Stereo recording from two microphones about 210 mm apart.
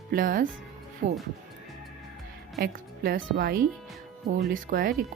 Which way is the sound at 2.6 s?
45° right (ahead or behind).